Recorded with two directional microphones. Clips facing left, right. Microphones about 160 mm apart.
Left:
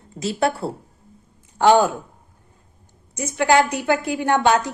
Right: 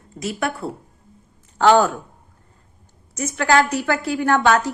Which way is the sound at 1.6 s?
15° left (ahead or behind).